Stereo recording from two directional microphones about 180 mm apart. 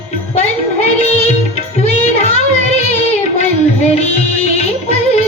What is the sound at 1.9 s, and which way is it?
Music, 35° left (ahead or behind).